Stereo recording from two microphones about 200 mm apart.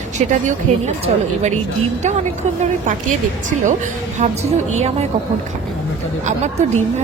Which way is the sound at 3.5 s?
40° right (ahead or behind).